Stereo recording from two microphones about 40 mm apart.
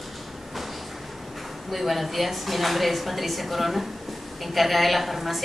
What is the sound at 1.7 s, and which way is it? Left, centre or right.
A woman's voice, centre.